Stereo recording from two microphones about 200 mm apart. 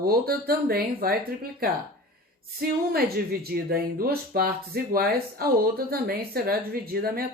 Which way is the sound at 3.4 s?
50° right (ahead or behind).